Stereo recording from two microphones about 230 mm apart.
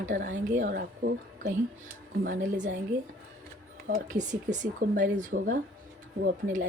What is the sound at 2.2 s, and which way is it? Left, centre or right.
Speech, right.